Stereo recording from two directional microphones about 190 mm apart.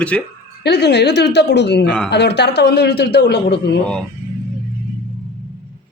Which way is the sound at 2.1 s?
65° left (ahead or behind).